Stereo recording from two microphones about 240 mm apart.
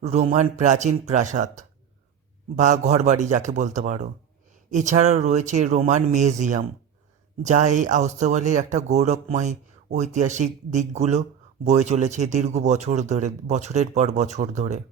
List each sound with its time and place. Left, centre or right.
0.0 s speech: right